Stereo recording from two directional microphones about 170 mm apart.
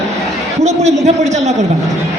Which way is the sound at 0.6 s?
40° right (ahead or behind).